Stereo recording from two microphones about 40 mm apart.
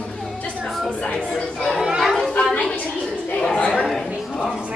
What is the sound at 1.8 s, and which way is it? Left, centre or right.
Children playing, centre.